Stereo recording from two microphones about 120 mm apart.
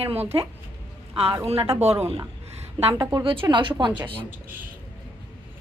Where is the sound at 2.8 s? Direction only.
50° right (ahead or behind).